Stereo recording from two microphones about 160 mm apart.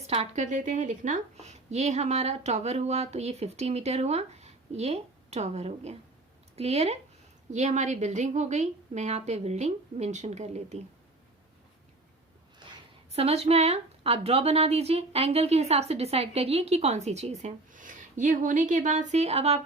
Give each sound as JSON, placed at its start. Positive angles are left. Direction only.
{"t": 0.1, "sound": "a woman's voice", "side_deg": -45}
{"t": 12.6, "sound": "a sound", "side_deg": -30}
{"t": 13.1, "sound": "a woman's voice", "side_deg": -40}